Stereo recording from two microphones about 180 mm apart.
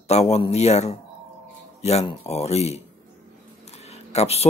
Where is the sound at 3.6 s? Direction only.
35° left (ahead or behind).